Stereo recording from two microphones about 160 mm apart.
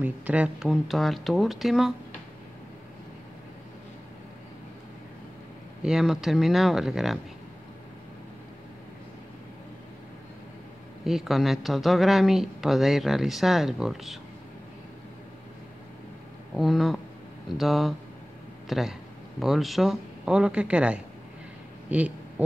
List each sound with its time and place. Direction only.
0.0 s speech: 10° right (ahead or behind)
5.8 s speech: 5° right (ahead or behind)
11.1 s speech: centre (ahead or behind)
16.5 s speech: centre (ahead or behind)
21.9 s a sound: 10° right (ahead or behind)